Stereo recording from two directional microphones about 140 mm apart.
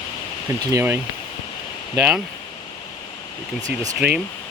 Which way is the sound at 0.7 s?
15° right (ahead or behind).